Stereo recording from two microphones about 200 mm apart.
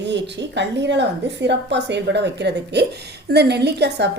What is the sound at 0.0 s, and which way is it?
A woman's voice, 60° right (ahead or behind).